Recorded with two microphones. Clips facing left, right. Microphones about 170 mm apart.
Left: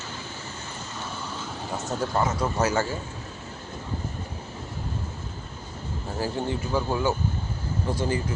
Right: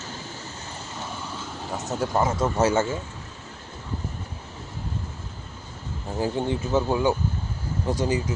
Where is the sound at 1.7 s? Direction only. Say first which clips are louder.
Right 1 dB; centre (ahead or behind).